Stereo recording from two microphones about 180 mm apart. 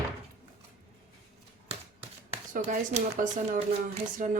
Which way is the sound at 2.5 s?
45° right (ahead or behind).